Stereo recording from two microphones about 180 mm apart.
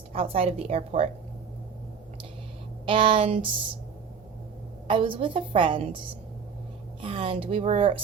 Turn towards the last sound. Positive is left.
turn(degrees=-30)  # may be behind; listen again after turning